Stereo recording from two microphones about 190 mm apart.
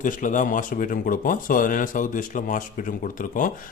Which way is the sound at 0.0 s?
45° left (ahead or behind).